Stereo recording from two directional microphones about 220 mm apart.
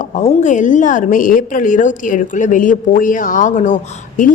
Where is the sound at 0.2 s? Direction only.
30° left (ahead or behind).